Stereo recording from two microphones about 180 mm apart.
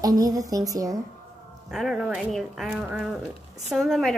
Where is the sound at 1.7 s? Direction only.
Centre (ahead or behind).